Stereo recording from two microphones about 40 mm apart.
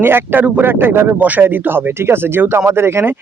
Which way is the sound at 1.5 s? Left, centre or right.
Right.